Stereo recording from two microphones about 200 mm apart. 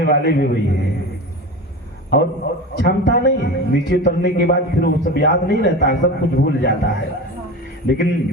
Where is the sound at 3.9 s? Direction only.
55° left (ahead or behind).